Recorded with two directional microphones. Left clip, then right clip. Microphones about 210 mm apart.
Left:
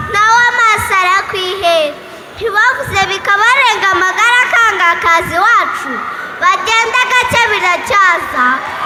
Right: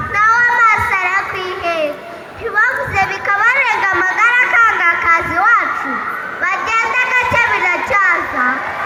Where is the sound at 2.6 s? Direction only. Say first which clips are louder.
Left 2 dB; 25° left (ahead or behind).